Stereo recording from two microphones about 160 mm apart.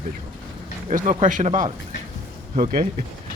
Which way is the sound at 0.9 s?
55° right (ahead or behind).